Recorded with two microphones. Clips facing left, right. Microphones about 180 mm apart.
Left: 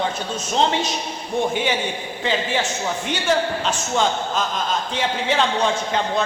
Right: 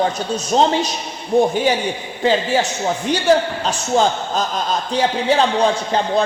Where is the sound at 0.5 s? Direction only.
40° right (ahead or behind).